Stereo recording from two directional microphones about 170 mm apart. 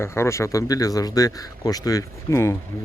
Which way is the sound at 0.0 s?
15° left (ahead or behind).